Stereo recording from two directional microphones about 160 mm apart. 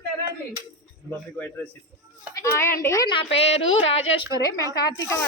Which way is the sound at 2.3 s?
15° left (ahead or behind).